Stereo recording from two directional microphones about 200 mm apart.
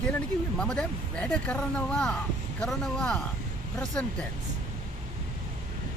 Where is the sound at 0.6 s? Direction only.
5° left (ahead or behind).